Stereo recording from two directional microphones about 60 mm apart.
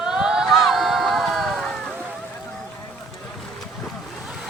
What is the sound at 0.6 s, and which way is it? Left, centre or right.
Run, centre.